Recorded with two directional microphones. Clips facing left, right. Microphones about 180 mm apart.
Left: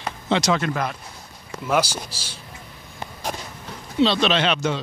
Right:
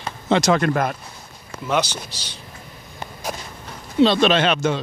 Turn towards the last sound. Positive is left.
turn(degrees=-50)  # may be behind; listen again after turning